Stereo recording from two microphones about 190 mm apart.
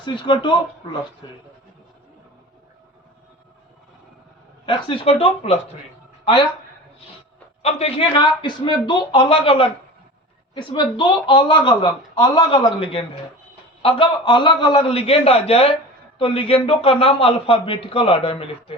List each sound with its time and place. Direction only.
0.0 s a man's voice: 25° left (ahead or behind)
4.6 s a man's voice: 25° left (ahead or behind)
7.6 s a man's voice: 35° left (ahead or behind)